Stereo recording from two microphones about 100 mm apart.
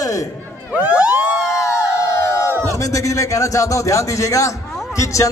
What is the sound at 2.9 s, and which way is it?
A man's voice, 35° left (ahead or behind).